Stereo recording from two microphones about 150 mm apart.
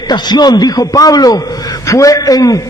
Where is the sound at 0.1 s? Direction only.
30° left (ahead or behind).